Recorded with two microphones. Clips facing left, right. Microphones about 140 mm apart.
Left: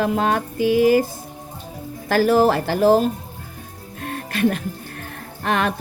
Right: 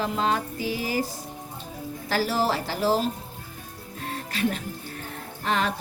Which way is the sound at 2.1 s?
55° left (ahead or behind).